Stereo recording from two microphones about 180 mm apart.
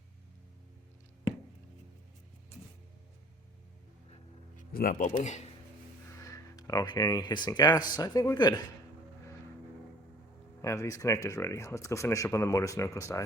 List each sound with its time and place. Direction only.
4.5 s speech: 50° left (ahead or behind)
6.1 s speech: 20° left (ahead or behind)
10.6 s speech: 15° left (ahead or behind)